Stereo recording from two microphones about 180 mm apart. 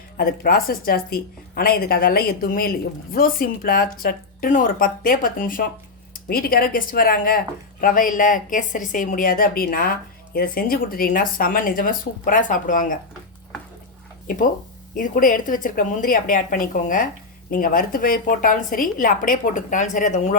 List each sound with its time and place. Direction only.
0.2 s a woman's voice: 55° left (ahead or behind)
14.3 s speech: 50° left (ahead or behind)